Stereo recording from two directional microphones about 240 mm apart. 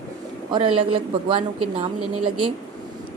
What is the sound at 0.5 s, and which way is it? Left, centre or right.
Speech, right.